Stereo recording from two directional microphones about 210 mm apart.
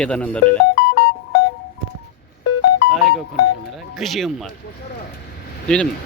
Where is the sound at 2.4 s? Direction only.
90° left.